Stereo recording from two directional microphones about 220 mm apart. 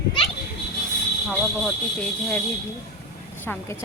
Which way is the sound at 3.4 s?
10° left (ahead or behind).